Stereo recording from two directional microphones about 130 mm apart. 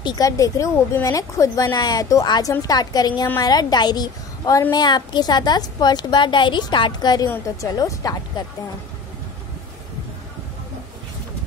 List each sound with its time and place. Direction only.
0.0 s a woman's voice: 30° left (ahead or behind)